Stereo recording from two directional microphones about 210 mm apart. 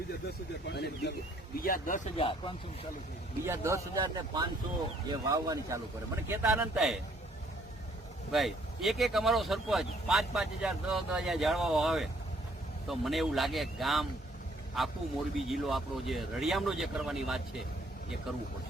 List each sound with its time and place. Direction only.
0.7 s speech: 50° left (ahead or behind)
2.1 s speech: 25° left (ahead or behind)
3.4 s speech: 15° right (ahead or behind)
8.3 s speech: centre (ahead or behind)